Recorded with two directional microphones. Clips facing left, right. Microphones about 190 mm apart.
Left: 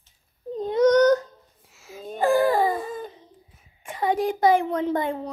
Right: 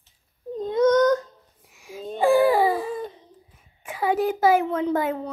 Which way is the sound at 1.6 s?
15° right (ahead or behind).